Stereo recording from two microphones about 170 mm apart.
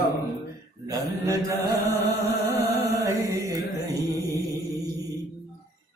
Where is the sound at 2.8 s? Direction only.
20° right (ahead or behind).